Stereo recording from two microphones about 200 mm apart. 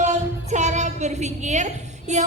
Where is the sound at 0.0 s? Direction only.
35° right (ahead or behind).